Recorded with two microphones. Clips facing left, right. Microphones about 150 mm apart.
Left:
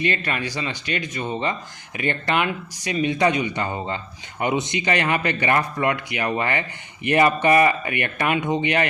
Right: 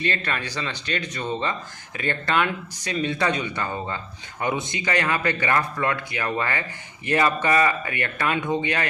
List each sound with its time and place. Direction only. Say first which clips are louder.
0.0 s speech: left 3 dB; 15° left (ahead or behind)